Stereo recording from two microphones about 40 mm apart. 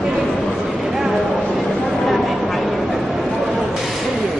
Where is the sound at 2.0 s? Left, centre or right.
Centre.